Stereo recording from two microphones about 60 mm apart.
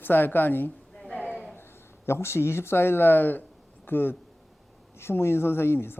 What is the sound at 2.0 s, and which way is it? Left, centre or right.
Speech, left.